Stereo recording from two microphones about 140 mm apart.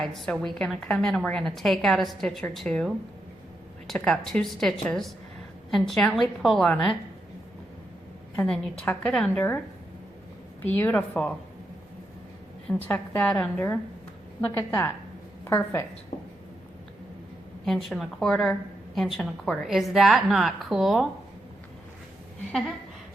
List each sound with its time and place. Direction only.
0.0 s a woman's voice: centre (ahead or behind)
8.4 s a woman's voice: 5° left (ahead or behind)
10.8 s a woman's voice: 10° left (ahead or behind)
12.6 s a woman's voice: 5° left (ahead or behind)
17.7 s a woman's voice: centre (ahead or behind)